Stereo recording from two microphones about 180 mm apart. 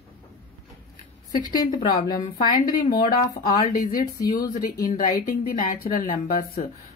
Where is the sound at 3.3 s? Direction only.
30° left (ahead or behind).